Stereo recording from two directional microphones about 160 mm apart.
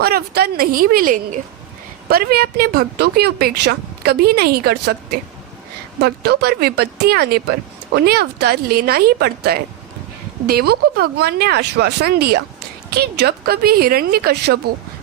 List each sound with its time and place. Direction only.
0.0 s a woman's voice: 75° right (ahead or behind); by 1.4 s 60° right (ahead or behind)
2.0 s speech: 70° right (ahead or behind)